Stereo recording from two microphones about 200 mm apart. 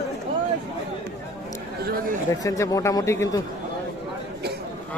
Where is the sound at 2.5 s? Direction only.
15° left (ahead or behind).